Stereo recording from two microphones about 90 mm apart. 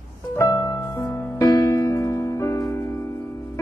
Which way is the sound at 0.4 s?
35° left (ahead or behind).